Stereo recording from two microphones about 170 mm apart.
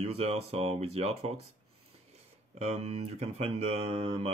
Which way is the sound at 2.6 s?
40° right (ahead or behind).